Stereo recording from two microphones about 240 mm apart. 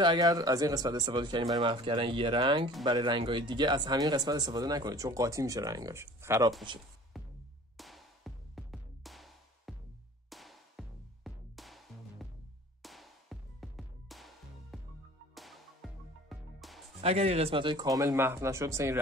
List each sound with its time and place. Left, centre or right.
0.0 s speech: centre
7.1 s music: centre
17.0 s speech: right